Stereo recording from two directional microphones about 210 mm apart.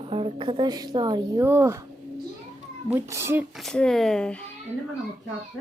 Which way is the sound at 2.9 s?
15° right (ahead or behind).